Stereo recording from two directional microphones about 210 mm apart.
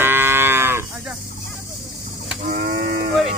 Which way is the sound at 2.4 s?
45° right (ahead or behind).